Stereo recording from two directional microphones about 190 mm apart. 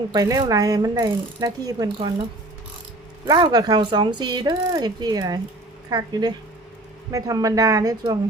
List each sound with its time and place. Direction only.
0.1 s speech: 20° right (ahead or behind)
3.2 s speech: 20° right (ahead or behind)